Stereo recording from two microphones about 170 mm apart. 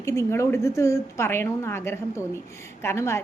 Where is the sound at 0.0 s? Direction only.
15° left (ahead or behind).